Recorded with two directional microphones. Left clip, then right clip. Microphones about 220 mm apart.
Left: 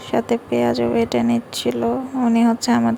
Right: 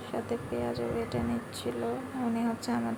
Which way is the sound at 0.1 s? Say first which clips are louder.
Left 15 dB; 40° left (ahead or behind).